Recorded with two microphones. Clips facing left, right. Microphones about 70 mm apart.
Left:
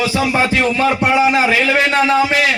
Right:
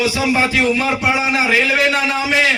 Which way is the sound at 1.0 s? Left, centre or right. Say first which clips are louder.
Left 3 dB; centre.